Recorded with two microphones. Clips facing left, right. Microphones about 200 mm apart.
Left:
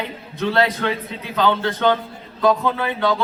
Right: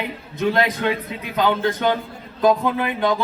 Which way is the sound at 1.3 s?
15° right (ahead or behind).